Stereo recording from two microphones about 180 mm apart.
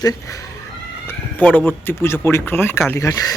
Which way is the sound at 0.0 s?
20° left (ahead or behind).